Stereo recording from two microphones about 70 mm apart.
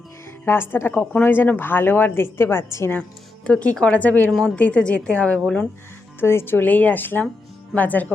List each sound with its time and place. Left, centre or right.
0.4 s a woman's voice: left
3.4 s speech: centre
4.3 s a woman's voice: centre
4.5 s a woman's voice: centre
6.1 s speech: left